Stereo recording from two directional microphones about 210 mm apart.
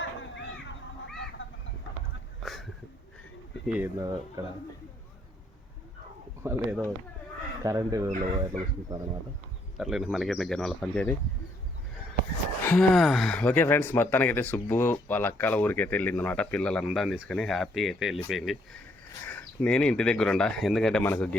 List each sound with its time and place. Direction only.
0.0 s a sound: 60° left (ahead or behind)
1.4 s chicken: 60° left (ahead or behind)
2.4 s a sound: centre (ahead or behind)
3.7 s speech: 10° right (ahead or behind)
6.4 s speech: 10° right (ahead or behind)
9.7 s speech: centre (ahead or behind)
12.6 s speech: 5° left (ahead or behind)